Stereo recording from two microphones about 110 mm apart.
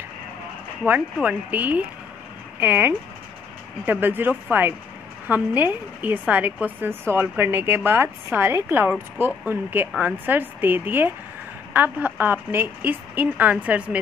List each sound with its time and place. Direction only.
0.8 s a woman's voice: 15° right (ahead or behind)